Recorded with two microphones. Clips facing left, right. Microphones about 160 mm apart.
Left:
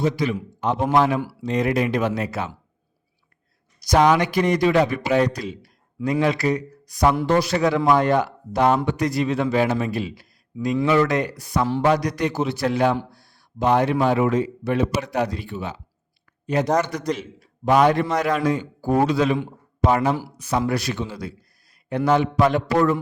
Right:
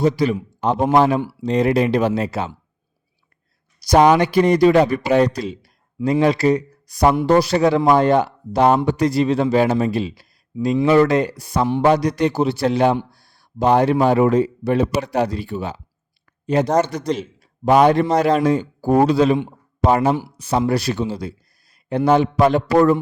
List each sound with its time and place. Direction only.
0.0 s a man's voice: 35° right (ahead or behind)
3.8 s a man's voice: 30° right (ahead or behind)